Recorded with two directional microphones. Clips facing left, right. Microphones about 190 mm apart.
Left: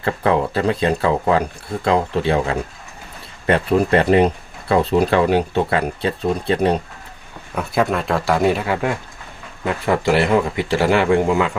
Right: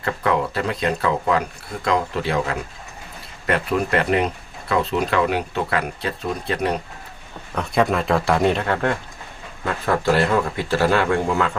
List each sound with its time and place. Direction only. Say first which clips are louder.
0.0 s speech: left 3 dB; 30° left (ahead or behind)
7.5 s speech: even; 5° left (ahead or behind)